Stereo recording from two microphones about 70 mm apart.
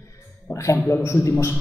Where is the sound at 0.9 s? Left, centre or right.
Left.